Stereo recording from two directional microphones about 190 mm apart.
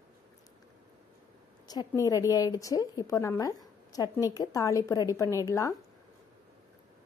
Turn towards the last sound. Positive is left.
turn(degrees=15)  # may be behind; listen again after turning